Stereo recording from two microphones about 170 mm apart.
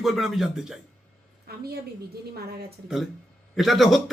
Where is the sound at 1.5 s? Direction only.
70° right (ahead or behind).